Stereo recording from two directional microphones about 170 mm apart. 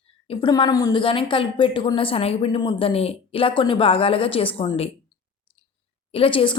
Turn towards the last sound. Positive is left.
turn(degrees=30)  # may be behind; listen again after turning